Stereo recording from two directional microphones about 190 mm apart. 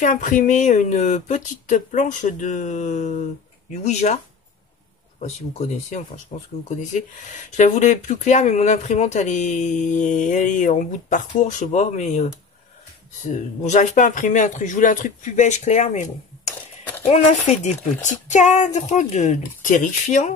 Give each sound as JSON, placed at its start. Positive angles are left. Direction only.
{"t": 0.0, "sound": "speech", "side_deg": 40}
{"t": 5.2, "sound": "speech", "side_deg": 35}
{"t": 13.3, "sound": "speech", "side_deg": 40}